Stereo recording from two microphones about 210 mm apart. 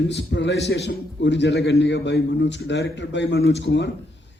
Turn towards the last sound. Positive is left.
turn(degrees=55)  # may be behind; listen again after turning